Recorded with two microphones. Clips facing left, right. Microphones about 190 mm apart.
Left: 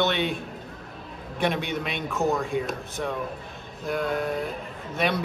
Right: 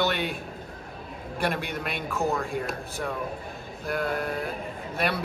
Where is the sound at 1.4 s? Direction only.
5° right (ahead or behind).